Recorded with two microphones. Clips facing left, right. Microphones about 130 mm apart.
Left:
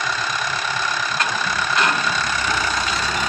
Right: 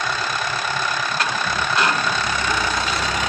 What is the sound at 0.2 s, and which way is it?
Vehicle, centre (ahead or behind).